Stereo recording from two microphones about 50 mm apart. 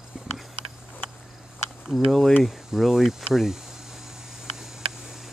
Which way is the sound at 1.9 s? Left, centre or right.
Centre.